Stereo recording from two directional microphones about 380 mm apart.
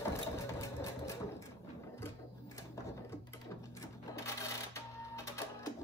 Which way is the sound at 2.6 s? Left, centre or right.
Centre.